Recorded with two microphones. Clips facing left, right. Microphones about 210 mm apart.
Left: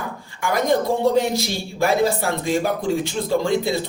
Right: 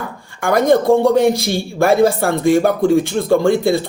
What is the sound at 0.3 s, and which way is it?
Speech, 50° right (ahead or behind).